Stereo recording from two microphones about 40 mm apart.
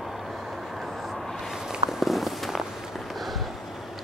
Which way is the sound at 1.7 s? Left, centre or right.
Centre.